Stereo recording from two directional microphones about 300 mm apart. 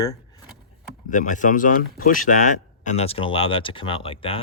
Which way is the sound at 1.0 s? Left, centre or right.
Left.